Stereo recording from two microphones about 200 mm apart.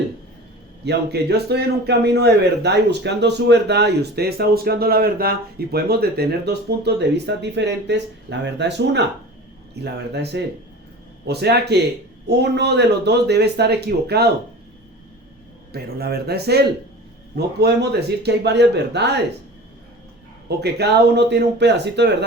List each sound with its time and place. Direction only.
0.9 s a man's voice: 55° right (ahead or behind)
15.7 s a man's voice: 50° right (ahead or behind)
20.6 s a man's voice: 55° right (ahead or behind)